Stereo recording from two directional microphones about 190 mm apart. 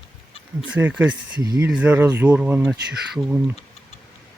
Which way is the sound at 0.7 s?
10° right (ahead or behind).